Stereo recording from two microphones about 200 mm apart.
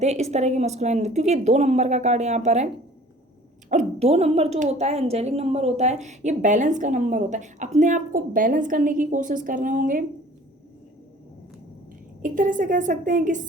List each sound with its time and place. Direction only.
0.0 s speech: 35° right (ahead or behind)
3.7 s speech: 35° right (ahead or behind)
12.2 s speech: 40° right (ahead or behind)